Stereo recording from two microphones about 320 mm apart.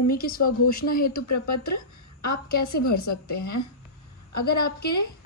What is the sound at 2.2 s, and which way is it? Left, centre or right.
A woman's voice, left.